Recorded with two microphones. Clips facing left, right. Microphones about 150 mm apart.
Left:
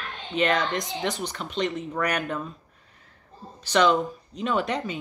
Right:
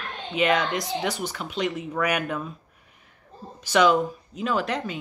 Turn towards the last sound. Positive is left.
turn(degrees=0)  # may be behind; listen again after turning